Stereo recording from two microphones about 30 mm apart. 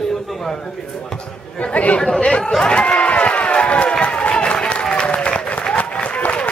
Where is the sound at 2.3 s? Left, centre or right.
Left.